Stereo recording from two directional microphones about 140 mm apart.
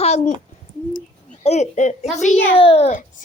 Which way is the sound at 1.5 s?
55° left (ahead or behind).